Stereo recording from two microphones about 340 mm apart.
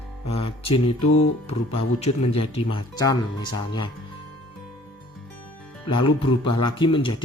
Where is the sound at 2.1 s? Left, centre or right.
Left.